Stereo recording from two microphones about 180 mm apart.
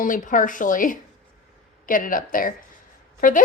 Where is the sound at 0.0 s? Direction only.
45° left (ahead or behind).